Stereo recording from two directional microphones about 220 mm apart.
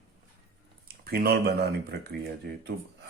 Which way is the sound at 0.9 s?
45° right (ahead or behind).